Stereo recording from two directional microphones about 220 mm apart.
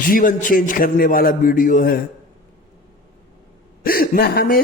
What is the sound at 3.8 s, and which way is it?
Speech, 40° left (ahead or behind).